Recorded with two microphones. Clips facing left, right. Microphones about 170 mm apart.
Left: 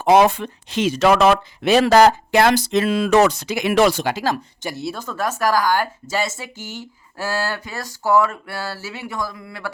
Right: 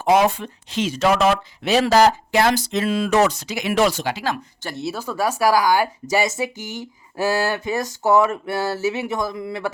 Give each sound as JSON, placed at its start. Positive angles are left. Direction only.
{"t": 0.0, "sound": "speech", "side_deg": 70}
{"t": 4.7, "sound": "speech", "side_deg": 0}